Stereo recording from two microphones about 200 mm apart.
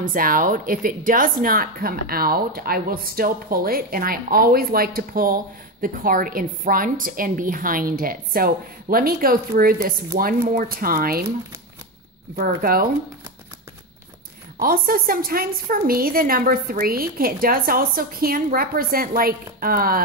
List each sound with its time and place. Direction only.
0.0 s a woman's voice: 45° right (ahead or behind)
12.4 s a woman's voice: 45° right (ahead or behind)
14.6 s a woman's voice: 45° right (ahead or behind)